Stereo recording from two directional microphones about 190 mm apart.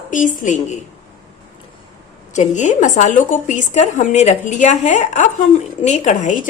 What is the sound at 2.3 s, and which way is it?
A woman's voice, 40° left (ahead or behind).